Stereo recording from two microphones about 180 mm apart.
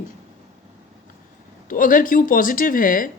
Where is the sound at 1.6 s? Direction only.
50° left (ahead or behind).